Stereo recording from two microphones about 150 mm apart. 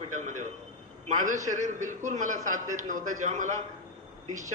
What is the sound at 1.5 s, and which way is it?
A man's voice, 55° right (ahead or behind).